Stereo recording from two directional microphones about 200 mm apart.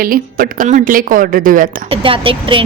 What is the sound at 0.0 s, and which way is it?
A woman's voice, 45° right (ahead or behind).